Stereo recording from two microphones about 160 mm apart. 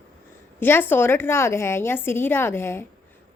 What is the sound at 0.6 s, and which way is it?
A woman's voice, 15° left (ahead or behind).